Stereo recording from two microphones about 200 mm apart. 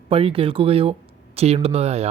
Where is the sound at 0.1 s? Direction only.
30° right (ahead or behind).